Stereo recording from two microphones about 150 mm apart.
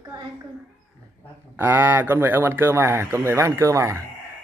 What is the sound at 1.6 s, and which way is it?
Speech, 15° right (ahead or behind).